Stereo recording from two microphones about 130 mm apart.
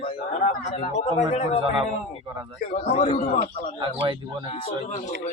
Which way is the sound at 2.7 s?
80° left.